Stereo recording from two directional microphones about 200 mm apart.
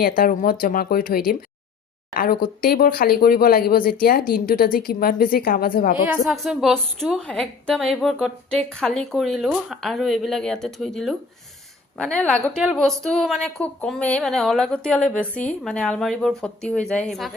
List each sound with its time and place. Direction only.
0.0 s a woman's voice: 45° left (ahead or behind)
6.1 s a woman's voice: centre (ahead or behind)